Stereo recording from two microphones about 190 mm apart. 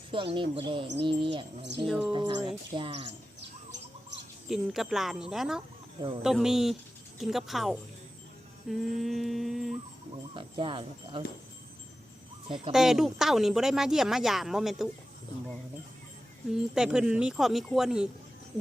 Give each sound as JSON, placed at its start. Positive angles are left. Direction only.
{"t": 0.1, "sound": "speech", "side_deg": -25}
{"t": 4.4, "sound": "speech", "side_deg": 0}
{"t": 10.3, "sound": "speech", "side_deg": -25}
{"t": 12.7, "sound": "speech", "side_deg": 0}
{"t": 16.5, "sound": "speech", "side_deg": -5}